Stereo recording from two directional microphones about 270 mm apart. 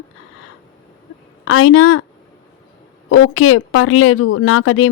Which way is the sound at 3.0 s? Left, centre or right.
Left.